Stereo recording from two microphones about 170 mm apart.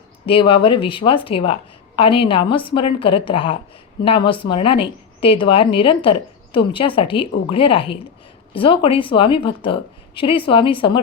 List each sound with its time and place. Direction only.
0.3 s speech: 30° left (ahead or behind)